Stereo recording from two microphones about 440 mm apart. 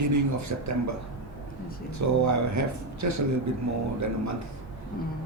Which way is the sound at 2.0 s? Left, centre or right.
Right.